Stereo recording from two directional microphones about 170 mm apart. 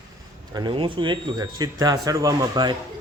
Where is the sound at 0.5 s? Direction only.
25° right (ahead or behind).